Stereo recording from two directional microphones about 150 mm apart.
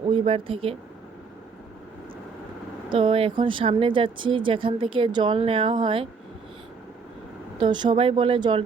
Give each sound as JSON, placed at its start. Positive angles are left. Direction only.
{"t": 0.1, "sound": "speech", "side_deg": -35}
{"t": 2.9, "sound": "speech", "side_deg": -35}
{"t": 7.6, "sound": "speech", "side_deg": -30}